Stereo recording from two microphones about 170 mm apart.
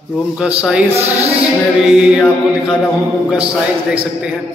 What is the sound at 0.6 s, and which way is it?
Speech, 5° right (ahead or behind).